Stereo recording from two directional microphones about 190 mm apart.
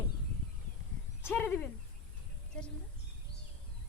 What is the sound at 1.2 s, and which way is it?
Speech, 10° left (ahead or behind).